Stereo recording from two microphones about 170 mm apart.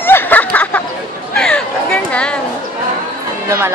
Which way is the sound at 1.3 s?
5° left (ahead or behind).